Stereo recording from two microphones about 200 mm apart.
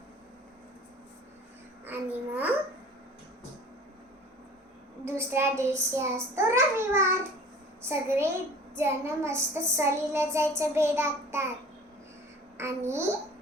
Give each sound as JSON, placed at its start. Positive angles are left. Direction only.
{"t": 1.8, "sound": "babbling", "side_deg": -10}
{"t": 5.0, "sound": "child singing", "side_deg": -10}
{"t": 12.5, "sound": "a child's voice", "side_deg": -15}